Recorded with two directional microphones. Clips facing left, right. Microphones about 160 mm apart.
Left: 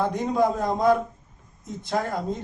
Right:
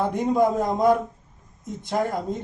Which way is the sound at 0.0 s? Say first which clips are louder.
Right 2 dB; 15° right (ahead or behind).